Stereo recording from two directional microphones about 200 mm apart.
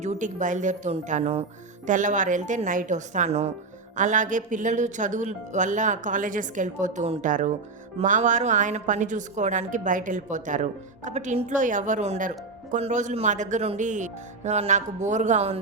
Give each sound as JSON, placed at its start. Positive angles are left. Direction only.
{"t": 0.0, "sound": "a woman's voice", "side_deg": -35}